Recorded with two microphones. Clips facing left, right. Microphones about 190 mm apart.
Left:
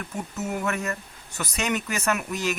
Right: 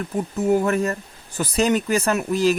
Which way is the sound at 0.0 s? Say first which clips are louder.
Right 9 dB; 30° right (ahead or behind).